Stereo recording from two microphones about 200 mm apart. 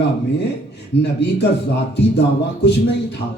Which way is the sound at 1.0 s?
60° left (ahead or behind).